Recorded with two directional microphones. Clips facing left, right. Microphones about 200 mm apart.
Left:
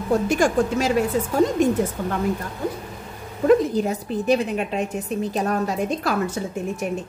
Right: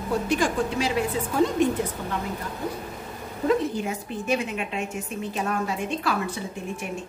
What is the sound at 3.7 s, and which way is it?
A woman's voice, 35° left (ahead or behind).